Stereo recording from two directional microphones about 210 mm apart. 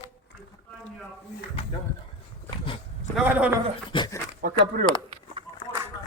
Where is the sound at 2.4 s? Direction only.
25° left (ahead or behind).